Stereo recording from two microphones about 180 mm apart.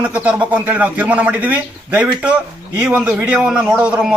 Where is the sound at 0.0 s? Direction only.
10° right (ahead or behind).